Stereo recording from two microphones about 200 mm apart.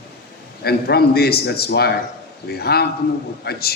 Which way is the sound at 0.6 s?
50° left (ahead or behind).